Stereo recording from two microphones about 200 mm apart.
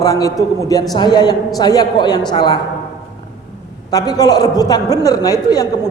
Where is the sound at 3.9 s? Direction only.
20° left (ahead or behind).